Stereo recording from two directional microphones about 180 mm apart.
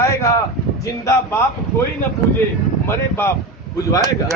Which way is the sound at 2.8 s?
15° left (ahead or behind).